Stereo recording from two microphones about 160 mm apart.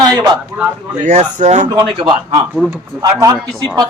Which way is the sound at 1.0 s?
50° right (ahead or behind).